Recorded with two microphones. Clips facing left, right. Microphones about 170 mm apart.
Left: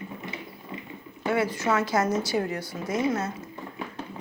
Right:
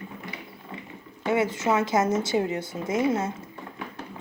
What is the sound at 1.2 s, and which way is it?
A child's voice, 20° right (ahead or behind).